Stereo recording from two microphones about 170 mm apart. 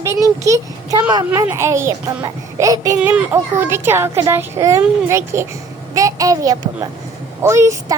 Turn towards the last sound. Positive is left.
turn(degrees=-20)  # may be behind; listen again after turning